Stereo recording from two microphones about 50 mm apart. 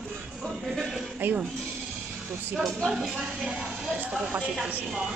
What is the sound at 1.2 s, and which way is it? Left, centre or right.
Speech, right.